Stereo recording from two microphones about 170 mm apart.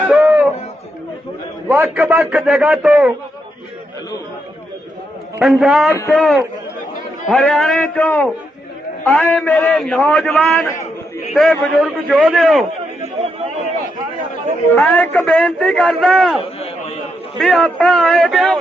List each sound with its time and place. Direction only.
0.1 s a sound: 5° right (ahead or behind)
1.6 s a man's voice: 10° right (ahead or behind)
5.4 s a man's voice: centre (ahead or behind)
14.8 s a man's voice: 10° left (ahead or behind)
16.4 s a sound: 35° left (ahead or behind)
17.4 s a man's voice: centre (ahead or behind)